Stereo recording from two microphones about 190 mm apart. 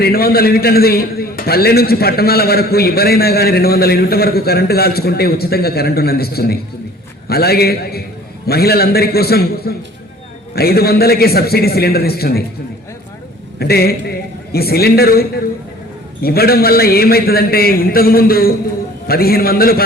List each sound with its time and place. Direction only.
0.0 s a man's voice: 55° left (ahead or behind)
13.6 s a man's voice: 55° left (ahead or behind)